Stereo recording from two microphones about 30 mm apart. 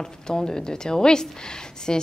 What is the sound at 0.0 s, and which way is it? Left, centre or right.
A woman's voice, left.